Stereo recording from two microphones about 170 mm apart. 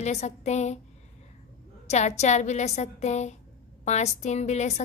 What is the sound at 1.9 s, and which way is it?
A woman's voice, 40° left (ahead or behind).